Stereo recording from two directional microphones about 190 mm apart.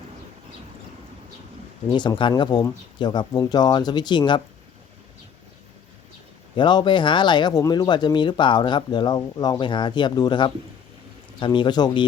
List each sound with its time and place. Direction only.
1.9 s speech: 25° left (ahead or behind)
6.6 s speech: 25° left (ahead or behind)